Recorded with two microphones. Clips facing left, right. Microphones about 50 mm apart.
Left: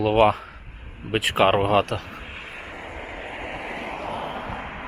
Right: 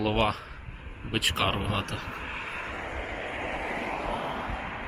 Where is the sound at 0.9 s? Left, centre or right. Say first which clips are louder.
Left 5 dB; centre.